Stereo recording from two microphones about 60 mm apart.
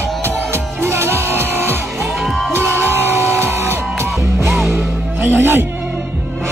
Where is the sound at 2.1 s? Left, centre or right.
Centre.